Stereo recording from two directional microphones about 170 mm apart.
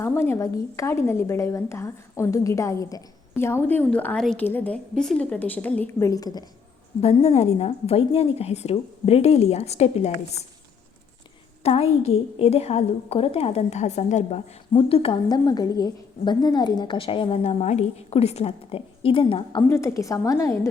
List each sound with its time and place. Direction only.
0.0 s a woman's voice: 15° left (ahead or behind)
7.0 s a woman's voice: 35° left (ahead or behind)
11.6 s a woman's voice: 35° left (ahead or behind)
19.6 s a woman's voice: 15° left (ahead or behind)